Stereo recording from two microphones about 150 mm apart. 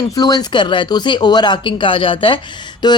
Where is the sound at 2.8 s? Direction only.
30° left (ahead or behind).